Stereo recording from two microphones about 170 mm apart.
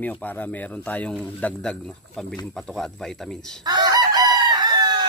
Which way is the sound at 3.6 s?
25° right (ahead or behind).